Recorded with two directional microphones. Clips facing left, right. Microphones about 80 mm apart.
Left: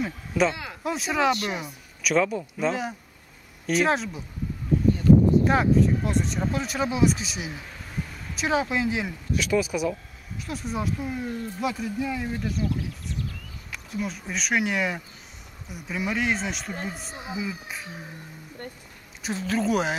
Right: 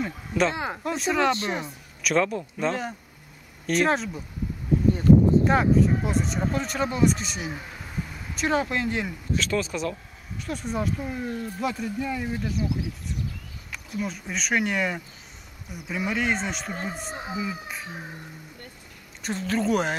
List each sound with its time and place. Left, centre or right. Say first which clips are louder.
0.0 s speech: left 1 dB; centre
0.5 s speech: right 3 dB; right
0.8 s speech: even; centre
5.4 s speech: even; centre
19.2 s speech: even; centre